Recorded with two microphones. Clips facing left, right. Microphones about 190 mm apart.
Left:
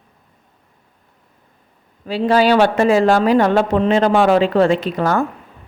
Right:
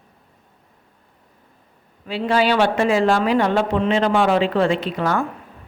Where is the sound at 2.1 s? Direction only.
40° left (ahead or behind).